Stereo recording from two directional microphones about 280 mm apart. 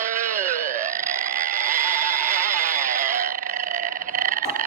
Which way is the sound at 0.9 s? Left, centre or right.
Right.